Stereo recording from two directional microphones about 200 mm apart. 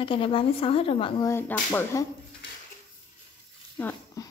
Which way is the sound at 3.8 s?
10° left (ahead or behind).